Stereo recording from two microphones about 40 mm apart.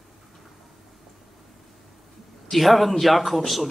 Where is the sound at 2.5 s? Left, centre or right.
Centre.